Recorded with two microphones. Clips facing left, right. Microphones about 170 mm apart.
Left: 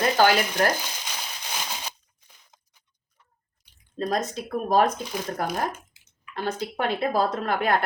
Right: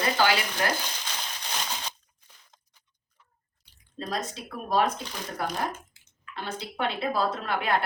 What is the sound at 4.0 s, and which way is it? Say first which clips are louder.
Speech: left 6 dB; 45° left (ahead or behind).